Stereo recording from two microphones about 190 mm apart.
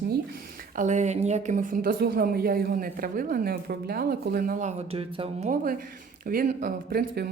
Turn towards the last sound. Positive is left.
turn(degrees=-55)  # may be behind; listen again after turning